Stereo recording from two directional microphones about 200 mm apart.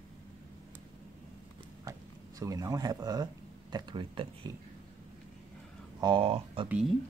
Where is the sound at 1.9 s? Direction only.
15° right (ahead or behind).